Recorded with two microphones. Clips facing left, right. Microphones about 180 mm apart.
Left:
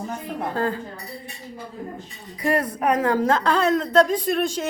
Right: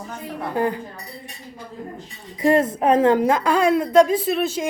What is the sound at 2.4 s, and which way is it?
A woman's voice, 25° right (ahead or behind).